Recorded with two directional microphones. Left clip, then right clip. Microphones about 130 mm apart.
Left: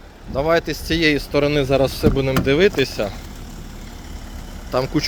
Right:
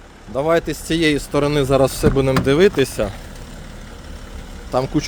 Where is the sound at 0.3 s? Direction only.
35° right (ahead or behind); by 3.1 s 60° right (ahead or behind).